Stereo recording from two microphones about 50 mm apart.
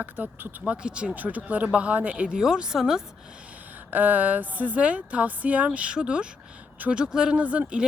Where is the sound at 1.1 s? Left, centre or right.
Right.